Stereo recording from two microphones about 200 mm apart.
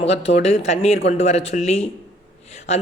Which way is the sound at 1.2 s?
30° left (ahead or behind).